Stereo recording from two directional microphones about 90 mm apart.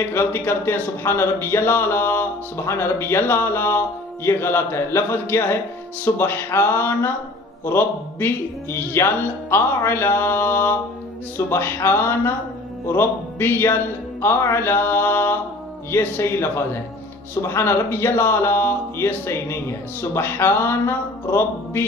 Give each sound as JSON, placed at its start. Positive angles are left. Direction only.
{"t": 0.1, "sound": "speech", "side_deg": 25}